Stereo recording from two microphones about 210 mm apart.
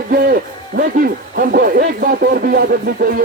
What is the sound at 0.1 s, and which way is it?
A man's voice, 45° right (ahead or behind).